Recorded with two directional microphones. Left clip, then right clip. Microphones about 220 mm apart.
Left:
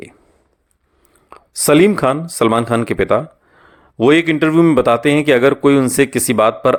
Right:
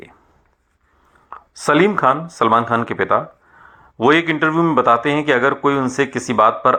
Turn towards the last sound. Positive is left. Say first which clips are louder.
# left 1 dB
turn(degrees=55)  # may be behind; listen again after turning